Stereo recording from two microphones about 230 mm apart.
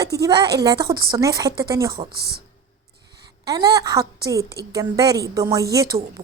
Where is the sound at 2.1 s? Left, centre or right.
Right.